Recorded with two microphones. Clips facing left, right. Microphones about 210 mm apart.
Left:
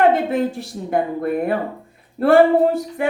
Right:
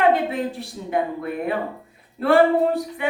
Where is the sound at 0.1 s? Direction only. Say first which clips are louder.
Left 3 dB; 45° left (ahead or behind).